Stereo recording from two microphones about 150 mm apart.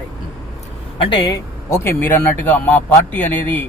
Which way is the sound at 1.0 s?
30° left (ahead or behind).